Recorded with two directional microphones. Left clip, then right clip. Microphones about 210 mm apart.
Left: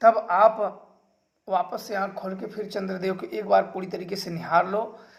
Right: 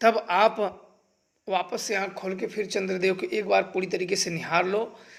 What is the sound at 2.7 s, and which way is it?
A man's voice, 45° right (ahead or behind).